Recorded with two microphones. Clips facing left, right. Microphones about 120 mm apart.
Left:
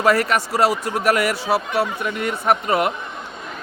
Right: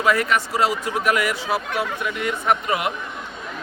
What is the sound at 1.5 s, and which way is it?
Speech, 5° left (ahead or behind).